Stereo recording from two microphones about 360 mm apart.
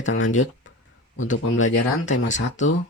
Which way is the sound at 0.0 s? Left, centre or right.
Left.